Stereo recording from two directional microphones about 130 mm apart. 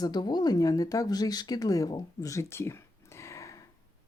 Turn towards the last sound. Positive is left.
turn(degrees=25)  # may be behind; listen again after turning